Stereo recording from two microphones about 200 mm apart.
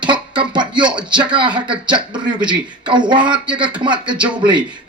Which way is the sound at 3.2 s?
5° right (ahead or behind).